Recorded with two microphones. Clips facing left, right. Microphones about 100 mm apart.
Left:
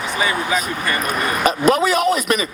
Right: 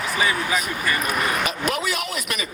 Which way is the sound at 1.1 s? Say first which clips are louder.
Left 2 dB; 5° right (ahead or behind).